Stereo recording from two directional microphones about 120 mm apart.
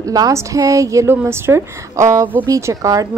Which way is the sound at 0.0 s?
30° right (ahead or behind).